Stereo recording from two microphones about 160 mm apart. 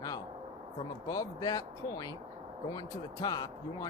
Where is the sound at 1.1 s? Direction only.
25° left (ahead or behind).